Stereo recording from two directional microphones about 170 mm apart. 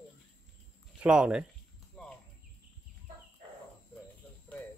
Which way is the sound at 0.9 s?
5° right (ahead or behind).